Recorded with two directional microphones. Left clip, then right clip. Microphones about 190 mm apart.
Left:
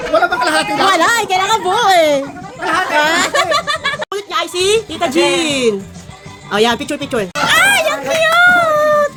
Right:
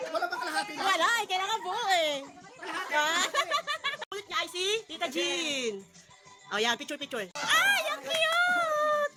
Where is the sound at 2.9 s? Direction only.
10° right (ahead or behind).